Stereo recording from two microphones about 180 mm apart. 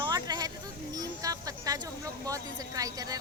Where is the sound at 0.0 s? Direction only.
20° right (ahead or behind).